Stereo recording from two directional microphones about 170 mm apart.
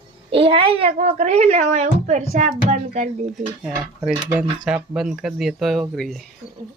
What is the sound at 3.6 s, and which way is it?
Speech, 5° right (ahead or behind).